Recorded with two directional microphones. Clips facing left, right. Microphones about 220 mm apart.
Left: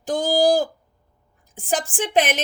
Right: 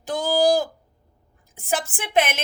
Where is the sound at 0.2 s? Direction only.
35° left (ahead or behind).